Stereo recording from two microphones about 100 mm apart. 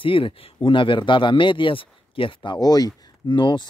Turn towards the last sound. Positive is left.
turn(degrees=50)  # may be behind; listen again after turning